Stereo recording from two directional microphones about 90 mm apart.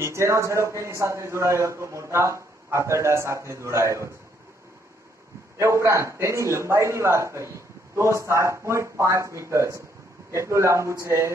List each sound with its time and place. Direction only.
0.0 s a man's voice: 30° right (ahead or behind)
5.6 s a man's voice: 30° right (ahead or behind)